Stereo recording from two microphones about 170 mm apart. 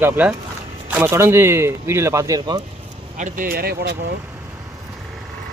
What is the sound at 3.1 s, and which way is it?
Speech, 50° right (ahead or behind).